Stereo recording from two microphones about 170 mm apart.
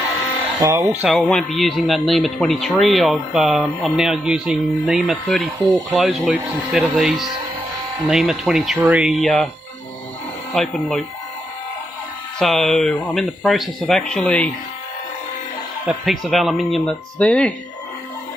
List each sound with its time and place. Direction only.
0.6 s speech: 15° right (ahead or behind)
1.0 s speech: 5° left (ahead or behind)
10.5 s speech: 5° left (ahead or behind)
12.4 s speech: centre (ahead or behind)
15.9 s speech: centre (ahead or behind)